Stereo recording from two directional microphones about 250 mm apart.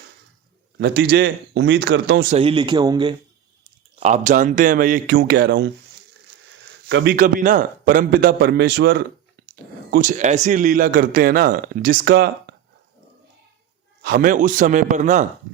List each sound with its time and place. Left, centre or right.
0.8 s speech: right
2.3 s speech: right
4.0 s a man's voice: right
6.8 s a man's voice: right
14.0 s a man's voice: right